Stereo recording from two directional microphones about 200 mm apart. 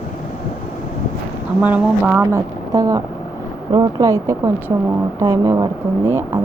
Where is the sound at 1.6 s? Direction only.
10° right (ahead or behind).